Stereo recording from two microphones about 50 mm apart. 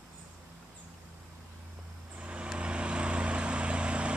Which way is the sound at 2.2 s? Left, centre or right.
Right.